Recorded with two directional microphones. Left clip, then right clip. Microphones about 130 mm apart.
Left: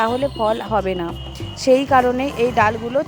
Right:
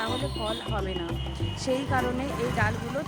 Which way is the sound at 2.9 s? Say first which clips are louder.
Left 13 dB; 45° left (ahead or behind).